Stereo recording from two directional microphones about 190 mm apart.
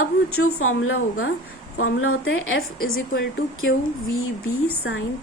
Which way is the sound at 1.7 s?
75° left (ahead or behind).